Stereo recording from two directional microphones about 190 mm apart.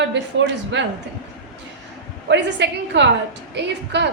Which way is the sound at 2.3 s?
65° right (ahead or behind).